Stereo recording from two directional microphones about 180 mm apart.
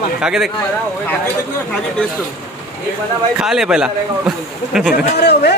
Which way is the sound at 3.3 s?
5° right (ahead or behind).